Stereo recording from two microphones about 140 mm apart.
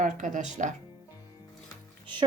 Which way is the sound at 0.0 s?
70° right (ahead or behind).